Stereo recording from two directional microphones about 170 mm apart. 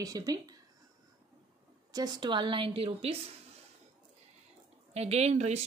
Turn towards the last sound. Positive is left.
turn(degrees=-40)  # may be behind; listen again after turning